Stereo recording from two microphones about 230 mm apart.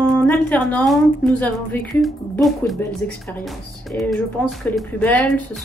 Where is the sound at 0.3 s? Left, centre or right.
Centre.